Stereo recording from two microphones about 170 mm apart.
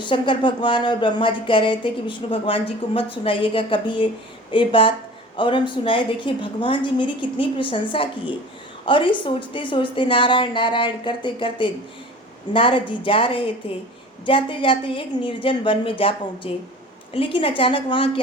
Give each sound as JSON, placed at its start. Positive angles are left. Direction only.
{"t": 0.0, "sound": "a woman's voice", "side_deg": 30}